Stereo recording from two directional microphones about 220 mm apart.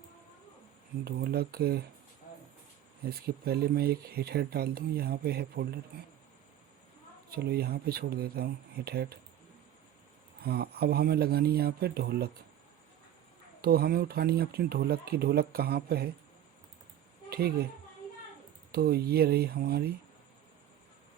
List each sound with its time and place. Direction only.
1.0 s speech: 45° right (ahead or behind)
3.0 s speech: 45° right (ahead or behind)
7.3 s speech: 45° right (ahead or behind)
10.4 s speech: 45° right (ahead or behind)
13.6 s speech: 45° right (ahead or behind)
17.2 s a woman's voice: 45° right (ahead or behind)
18.7 s speech: 45° right (ahead or behind)